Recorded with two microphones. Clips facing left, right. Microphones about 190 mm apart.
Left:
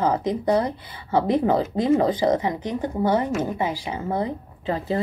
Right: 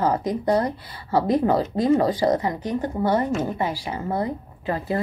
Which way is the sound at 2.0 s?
20° left (ahead or behind).